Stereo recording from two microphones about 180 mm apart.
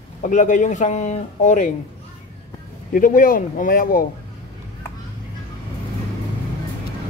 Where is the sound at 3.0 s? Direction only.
50° left (ahead or behind).